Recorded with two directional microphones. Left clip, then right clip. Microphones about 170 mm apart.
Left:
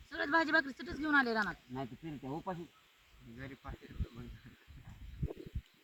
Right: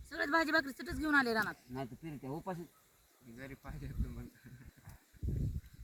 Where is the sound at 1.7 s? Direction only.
35° right (ahead or behind).